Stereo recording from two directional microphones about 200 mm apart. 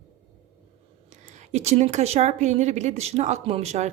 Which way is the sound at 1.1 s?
35° right (ahead or behind).